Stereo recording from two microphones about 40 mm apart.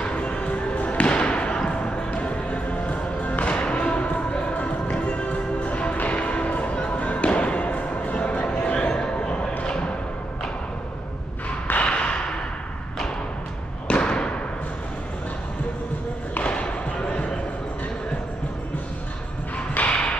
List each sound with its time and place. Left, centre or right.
0.0 s music: left
11.8 s a sound: left
13.8 s thump: left
16.4 s basketball bounce: left
19.7 s music: left